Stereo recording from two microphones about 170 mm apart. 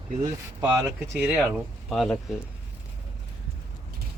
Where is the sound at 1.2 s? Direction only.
5° right (ahead or behind).